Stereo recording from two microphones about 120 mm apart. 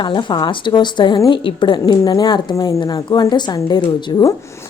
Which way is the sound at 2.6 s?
25° left (ahead or behind).